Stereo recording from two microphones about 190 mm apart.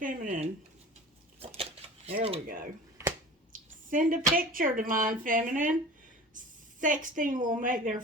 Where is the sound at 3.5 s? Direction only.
45° right (ahead or behind).